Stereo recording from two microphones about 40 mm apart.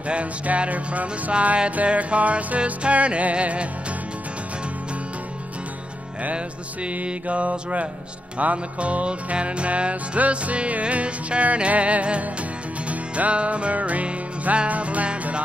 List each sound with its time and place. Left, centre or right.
0.1 s music: right
6.3 s music: right